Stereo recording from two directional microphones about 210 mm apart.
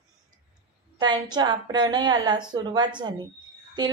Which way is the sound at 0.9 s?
20° right (ahead or behind).